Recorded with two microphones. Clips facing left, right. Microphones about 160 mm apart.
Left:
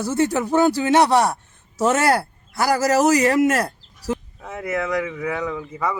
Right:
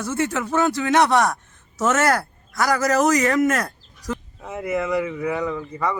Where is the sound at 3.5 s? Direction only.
35° left (ahead or behind).